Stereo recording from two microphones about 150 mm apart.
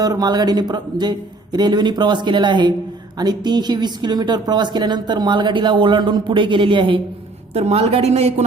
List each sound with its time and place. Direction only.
0.0 s a woman's voice: 25° right (ahead or behind); by 8.4 s 45° right (ahead or behind)